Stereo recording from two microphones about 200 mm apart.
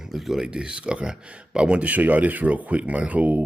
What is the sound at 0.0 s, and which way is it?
Speech, centre (ahead or behind).